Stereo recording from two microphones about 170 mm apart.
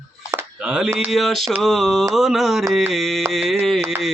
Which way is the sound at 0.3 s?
10° right (ahead or behind).